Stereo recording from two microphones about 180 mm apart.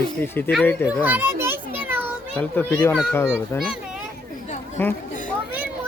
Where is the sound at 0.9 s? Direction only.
10° right (ahead or behind).